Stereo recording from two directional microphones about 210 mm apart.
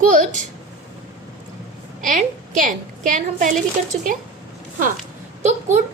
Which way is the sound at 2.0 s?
40° right (ahead or behind).